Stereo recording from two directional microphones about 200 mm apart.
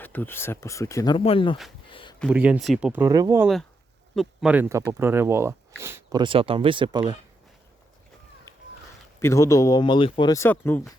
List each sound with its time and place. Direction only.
0.0 s speech: 10° left (ahead or behind); by 1.5 s 25° left (ahead or behind)
1.9 s a sound: 25° left (ahead or behind)
2.3 s speech: 5° right (ahead or behind)
3.4 s speech: centre (ahead or behind); by 7.2 s 20° right (ahead or behind)
8.5 s a sound: 15° left (ahead or behind)
9.2 s speech: 15° left (ahead or behind)